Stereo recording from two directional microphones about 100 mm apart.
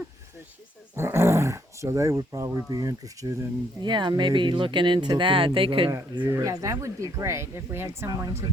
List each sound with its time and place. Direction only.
0.9 s speech: 25° right (ahead or behind)
3.8 s speech: 50° right (ahead or behind)
6.2 s speech: 30° right (ahead or behind)